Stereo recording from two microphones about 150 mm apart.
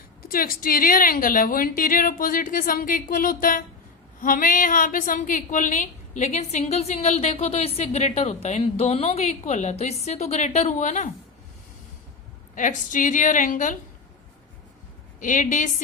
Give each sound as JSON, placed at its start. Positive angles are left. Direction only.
{"t": 0.3, "sound": "a woman's voice", "side_deg": 75}
{"t": 12.5, "sound": "a woman's voice", "side_deg": 60}
{"t": 15.2, "sound": "a woman's voice", "side_deg": 60}